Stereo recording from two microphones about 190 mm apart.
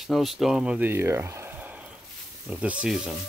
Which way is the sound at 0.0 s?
Centre (ahead or behind).